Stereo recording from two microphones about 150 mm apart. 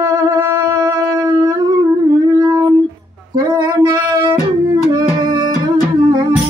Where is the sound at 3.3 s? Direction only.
25° right (ahead or behind).